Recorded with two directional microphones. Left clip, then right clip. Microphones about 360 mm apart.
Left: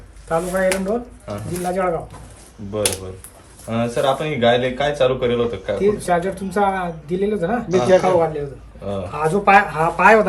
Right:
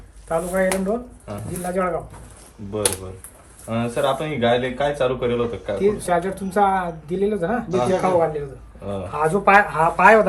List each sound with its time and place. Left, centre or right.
0.3 s speech: centre